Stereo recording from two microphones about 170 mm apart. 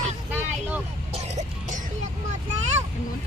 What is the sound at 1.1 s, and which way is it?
Music, 40° right (ahead or behind).